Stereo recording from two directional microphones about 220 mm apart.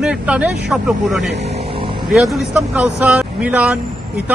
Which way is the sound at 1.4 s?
25° right (ahead or behind).